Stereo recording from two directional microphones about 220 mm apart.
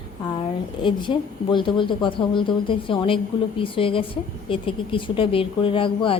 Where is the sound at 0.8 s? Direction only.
20° left (ahead or behind).